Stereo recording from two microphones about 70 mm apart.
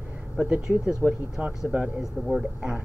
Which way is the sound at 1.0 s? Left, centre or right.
Centre.